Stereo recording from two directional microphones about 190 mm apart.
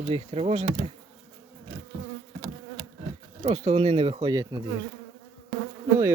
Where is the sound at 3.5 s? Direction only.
30° right (ahead or behind).